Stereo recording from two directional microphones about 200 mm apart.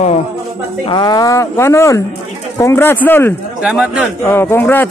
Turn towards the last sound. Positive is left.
turn(degrees=10)  # may be behind; listen again after turning